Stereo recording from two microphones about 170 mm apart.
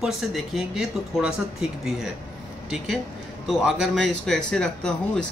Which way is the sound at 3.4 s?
Centre (ahead or behind).